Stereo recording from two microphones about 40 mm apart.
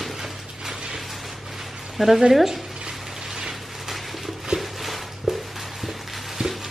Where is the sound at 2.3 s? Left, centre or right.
Centre.